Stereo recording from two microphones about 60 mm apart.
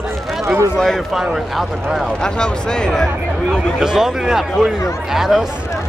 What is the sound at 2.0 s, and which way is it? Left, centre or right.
Speech, centre.